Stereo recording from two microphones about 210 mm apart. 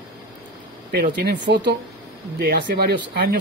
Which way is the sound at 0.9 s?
50° right (ahead or behind).